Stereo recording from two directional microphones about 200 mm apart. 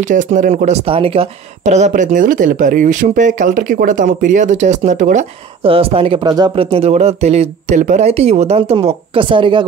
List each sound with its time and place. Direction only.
0.1 s speech: 40° right (ahead or behind); by 9.7 s 25° right (ahead or behind)